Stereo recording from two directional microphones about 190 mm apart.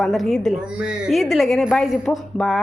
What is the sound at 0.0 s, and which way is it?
A woman's voice, centre (ahead or behind).